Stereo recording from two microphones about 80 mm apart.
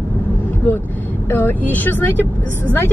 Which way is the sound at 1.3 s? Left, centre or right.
Left.